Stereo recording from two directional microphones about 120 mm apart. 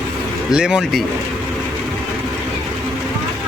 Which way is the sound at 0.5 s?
5° right (ahead or behind).